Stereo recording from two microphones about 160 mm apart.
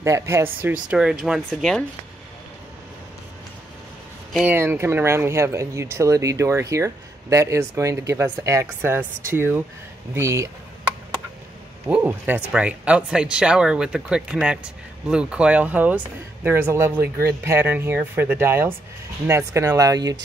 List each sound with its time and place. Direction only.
0.0 s speech: 20° right (ahead or behind); by 1.9 s 5° left (ahead or behind)
4.5 s speech: 15° right (ahead or behind)
11.9 s speech: 10° right (ahead or behind)